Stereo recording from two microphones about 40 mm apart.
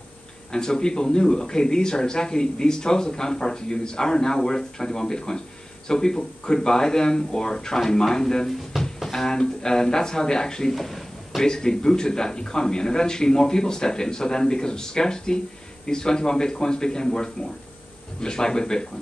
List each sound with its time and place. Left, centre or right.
0.5 s a man's voice: centre
10.7 s a sound: centre
11.4 s a man's voice: centre